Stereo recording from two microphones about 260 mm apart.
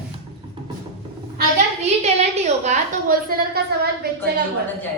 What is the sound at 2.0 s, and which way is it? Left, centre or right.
A woman's voice, right.